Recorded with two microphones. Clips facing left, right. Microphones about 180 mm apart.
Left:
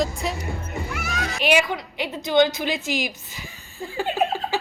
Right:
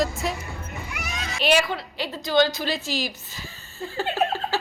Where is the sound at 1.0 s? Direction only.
20° right (ahead or behind).